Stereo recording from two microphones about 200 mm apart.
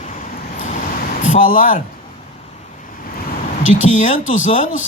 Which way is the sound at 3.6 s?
40° left (ahead or behind).